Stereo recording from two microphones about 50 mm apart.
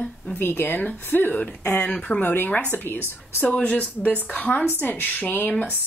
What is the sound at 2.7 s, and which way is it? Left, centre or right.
Speech, left.